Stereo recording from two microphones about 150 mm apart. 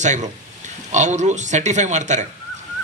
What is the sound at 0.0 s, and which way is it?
Speech, 50° right (ahead or behind).